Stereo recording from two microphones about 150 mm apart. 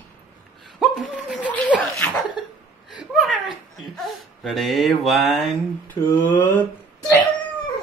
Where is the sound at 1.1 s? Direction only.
10° left (ahead or behind).